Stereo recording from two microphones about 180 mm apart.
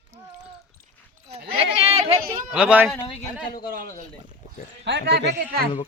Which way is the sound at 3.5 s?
55° left (ahead or behind).